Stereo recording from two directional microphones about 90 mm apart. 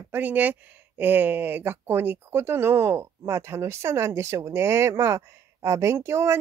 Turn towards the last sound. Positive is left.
turn(degrees=-30)  # may be behind; listen again after turning